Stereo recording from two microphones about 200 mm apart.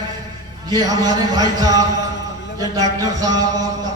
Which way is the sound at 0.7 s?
20° right (ahead or behind).